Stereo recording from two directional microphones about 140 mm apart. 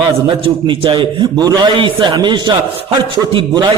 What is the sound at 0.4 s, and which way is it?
A man's voice, 40° right (ahead or behind).